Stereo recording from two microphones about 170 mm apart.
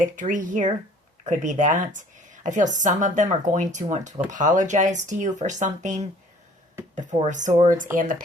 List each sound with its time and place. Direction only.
0.0 s speech: 50° right (ahead or behind)